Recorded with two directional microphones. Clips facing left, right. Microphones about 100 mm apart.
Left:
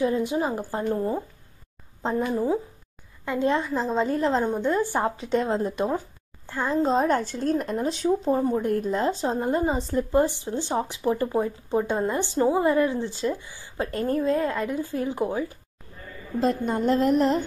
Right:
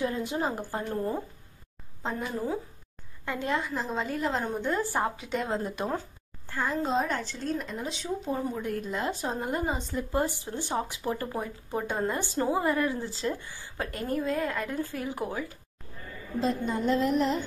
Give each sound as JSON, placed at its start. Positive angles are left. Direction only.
{"t": 0.0, "sound": "speech", "side_deg": 20}
{"t": 2.3, "sound": "speech", "side_deg": 20}
{"t": 6.9, "sound": "speech", "side_deg": 40}
{"t": 8.9, "sound": "speech", "side_deg": 30}
{"t": 13.8, "sound": "speech", "side_deg": 35}
{"t": 16.3, "sound": "speech", "side_deg": 50}